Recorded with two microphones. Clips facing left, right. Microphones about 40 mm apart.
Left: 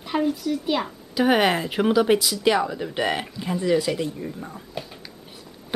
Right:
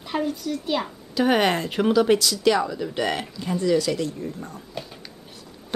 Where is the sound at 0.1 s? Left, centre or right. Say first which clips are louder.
Left 3 dB; centre.